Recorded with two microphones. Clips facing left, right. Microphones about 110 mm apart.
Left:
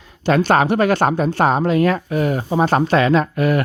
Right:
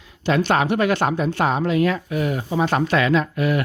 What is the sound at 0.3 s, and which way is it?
Speech, 45° left (ahead or behind).